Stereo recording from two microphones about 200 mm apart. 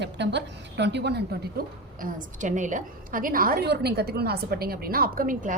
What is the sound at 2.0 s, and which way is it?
A woman's voice, 40° right (ahead or behind).